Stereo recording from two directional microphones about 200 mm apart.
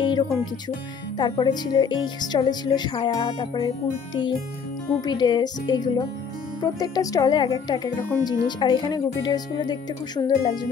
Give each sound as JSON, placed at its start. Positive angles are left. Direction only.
{"t": 0.0, "sound": "music", "side_deg": 20}
{"t": 1.1, "sound": "speech", "side_deg": 20}
{"t": 5.0, "sound": "speech", "side_deg": 20}